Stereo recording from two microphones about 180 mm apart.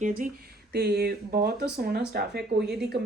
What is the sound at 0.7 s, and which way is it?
Speech, 65° right (ahead or behind).